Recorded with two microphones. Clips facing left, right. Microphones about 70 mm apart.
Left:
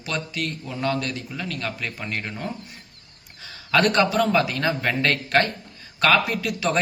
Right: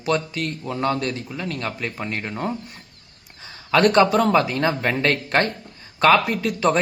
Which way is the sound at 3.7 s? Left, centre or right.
Right.